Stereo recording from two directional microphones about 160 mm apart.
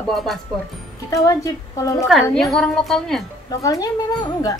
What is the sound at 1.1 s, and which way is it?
Speech, 20° left (ahead or behind).